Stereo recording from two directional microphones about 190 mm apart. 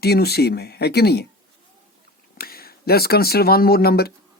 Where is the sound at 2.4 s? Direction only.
55° left (ahead or behind).